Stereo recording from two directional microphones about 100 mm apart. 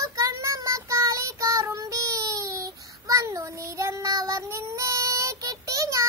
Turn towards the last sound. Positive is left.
turn(degrees=-30)  # may be behind; listen again after turning